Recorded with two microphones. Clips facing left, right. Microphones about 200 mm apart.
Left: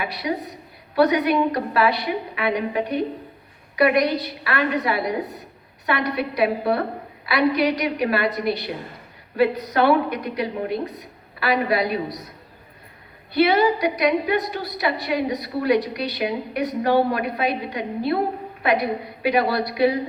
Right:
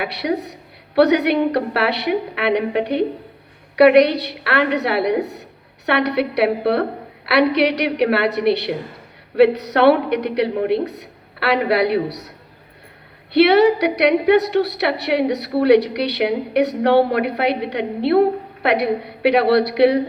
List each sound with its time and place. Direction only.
0.0 s a woman's voice: 70° right (ahead or behind)
13.3 s a woman's voice: 70° right (ahead or behind)